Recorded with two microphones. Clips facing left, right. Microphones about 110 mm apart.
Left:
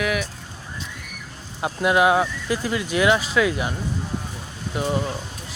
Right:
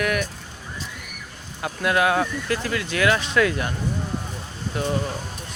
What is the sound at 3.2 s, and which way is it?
Speech, 5° left (ahead or behind).